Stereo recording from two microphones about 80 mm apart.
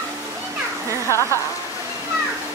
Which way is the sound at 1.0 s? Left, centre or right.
Left.